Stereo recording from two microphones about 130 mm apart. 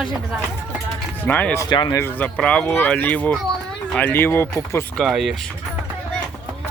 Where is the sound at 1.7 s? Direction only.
35° left (ahead or behind).